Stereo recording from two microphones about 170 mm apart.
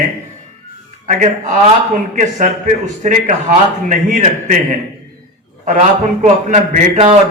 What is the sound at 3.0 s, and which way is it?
Speech, 45° right (ahead or behind).